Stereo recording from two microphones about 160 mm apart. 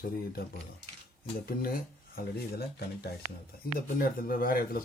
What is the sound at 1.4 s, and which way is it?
Speech, 65° left (ahead or behind).